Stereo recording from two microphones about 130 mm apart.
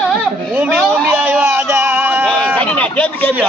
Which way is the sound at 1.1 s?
15° right (ahead or behind).